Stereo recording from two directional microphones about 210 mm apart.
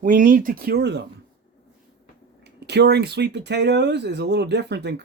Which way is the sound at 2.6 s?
55° right (ahead or behind).